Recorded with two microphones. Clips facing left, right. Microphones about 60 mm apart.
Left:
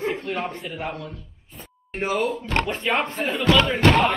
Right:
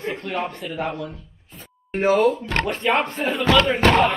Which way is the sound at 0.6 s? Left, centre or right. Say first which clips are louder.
Right 2 dB; centre.